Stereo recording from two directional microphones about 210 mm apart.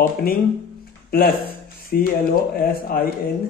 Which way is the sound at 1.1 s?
45° left (ahead or behind).